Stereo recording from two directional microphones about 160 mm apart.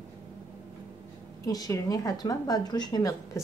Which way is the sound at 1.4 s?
20° left (ahead or behind).